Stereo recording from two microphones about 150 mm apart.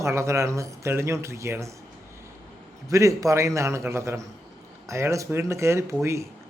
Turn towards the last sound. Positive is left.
turn(degrees=-20)  # may be behind; listen again after turning